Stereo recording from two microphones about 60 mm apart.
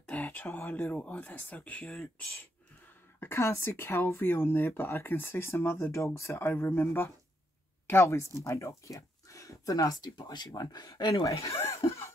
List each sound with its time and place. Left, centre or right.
0.1 s speech: left
3.2 s speech: left
6.4 s speech: left
11.6 s chuckle: left